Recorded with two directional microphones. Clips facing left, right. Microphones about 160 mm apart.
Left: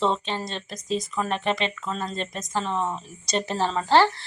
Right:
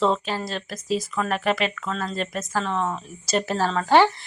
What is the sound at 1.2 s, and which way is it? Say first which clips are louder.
Speech: right 2 dB; 30° left (ahead or behind).